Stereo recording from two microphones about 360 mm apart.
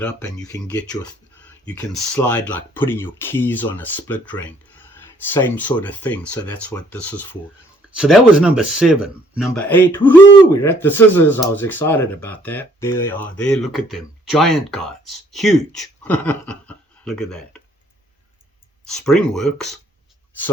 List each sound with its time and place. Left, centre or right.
0.0 s speech: centre
1.6 s speech: centre
18.9 s speech: centre